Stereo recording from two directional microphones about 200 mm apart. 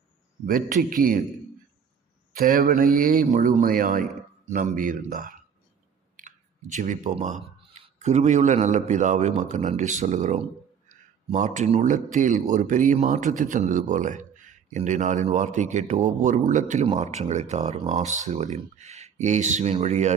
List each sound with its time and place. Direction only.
0.4 s speech: 45° right (ahead or behind)
2.3 s speech: 45° right (ahead or behind)